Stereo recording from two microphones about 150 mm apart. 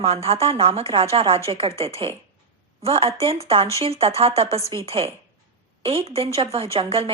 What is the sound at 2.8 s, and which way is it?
A woman's voice, 40° right (ahead or behind).